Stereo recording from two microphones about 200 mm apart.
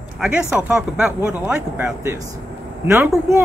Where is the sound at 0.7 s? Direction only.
5° right (ahead or behind).